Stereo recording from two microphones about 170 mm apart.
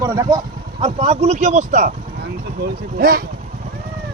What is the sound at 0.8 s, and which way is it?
Speech, 40° right (ahead or behind).